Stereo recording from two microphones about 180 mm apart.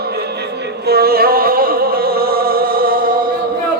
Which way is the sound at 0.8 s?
60° right (ahead or behind).